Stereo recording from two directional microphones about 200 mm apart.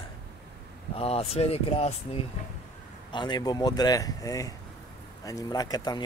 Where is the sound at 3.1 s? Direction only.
25° left (ahead or behind).